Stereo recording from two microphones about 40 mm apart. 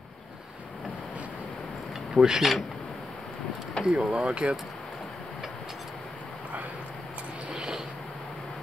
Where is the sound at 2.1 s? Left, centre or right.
Centre.